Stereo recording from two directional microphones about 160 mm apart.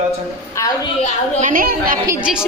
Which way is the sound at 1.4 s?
60° right (ahead or behind).